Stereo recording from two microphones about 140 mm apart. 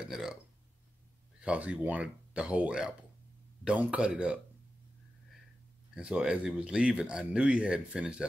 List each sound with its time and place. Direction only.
0.0 s speech: 5° right (ahead or behind)
1.4 s speech: 10° right (ahead or behind)
5.9 s speech: 5° right (ahead or behind)